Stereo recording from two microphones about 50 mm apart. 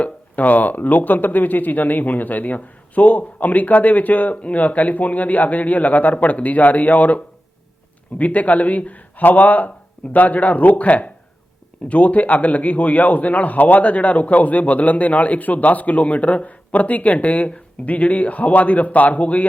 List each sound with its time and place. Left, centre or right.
0.0 s speech: left
8.2 s a man's voice: left